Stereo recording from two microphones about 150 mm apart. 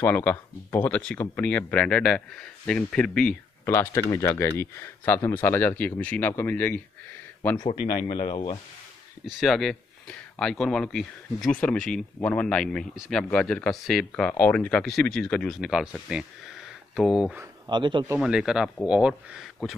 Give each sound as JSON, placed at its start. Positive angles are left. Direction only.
{"t": 0.0, "sound": "speech", "side_deg": 10}
{"t": 3.6, "sound": "speech", "side_deg": 15}
{"t": 8.0, "sound": "a man's voice", "side_deg": 30}
{"t": 9.2, "sound": "speech", "side_deg": 0}
{"t": 17.6, "sound": "a man's voice", "side_deg": -30}
{"t": 18.2, "sound": "speech", "side_deg": -5}